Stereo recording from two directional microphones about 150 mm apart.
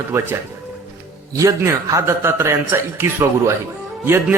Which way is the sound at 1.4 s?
20° right (ahead or behind).